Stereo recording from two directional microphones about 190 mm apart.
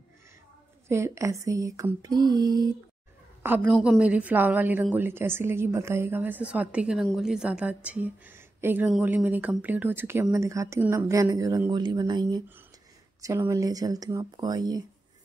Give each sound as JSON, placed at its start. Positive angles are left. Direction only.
{"t": 0.8, "sound": "a woman's voice", "side_deg": -15}
{"t": 3.4, "sound": "a woman's voice", "side_deg": -10}